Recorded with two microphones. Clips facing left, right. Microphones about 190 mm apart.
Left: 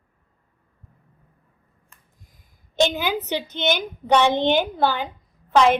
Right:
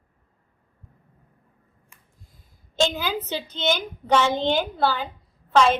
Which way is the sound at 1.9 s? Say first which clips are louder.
Left 1 dB; 10° right (ahead or behind).